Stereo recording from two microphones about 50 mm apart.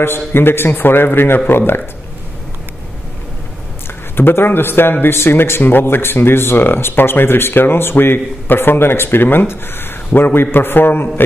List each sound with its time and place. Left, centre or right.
0.0 s speech: left
4.2 s speech: left